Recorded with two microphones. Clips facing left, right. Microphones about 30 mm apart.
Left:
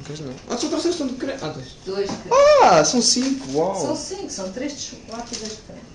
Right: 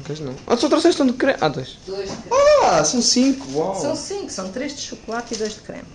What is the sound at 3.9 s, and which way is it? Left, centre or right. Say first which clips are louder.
Speech: right 2 dB; right.